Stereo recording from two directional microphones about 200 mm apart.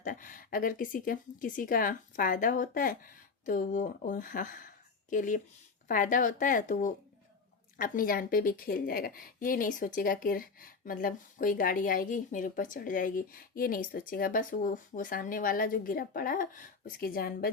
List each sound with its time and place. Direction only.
0.0 s a woman's voice: 45° left (ahead or behind)